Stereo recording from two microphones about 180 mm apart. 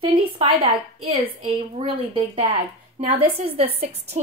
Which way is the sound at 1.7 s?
30° right (ahead or behind).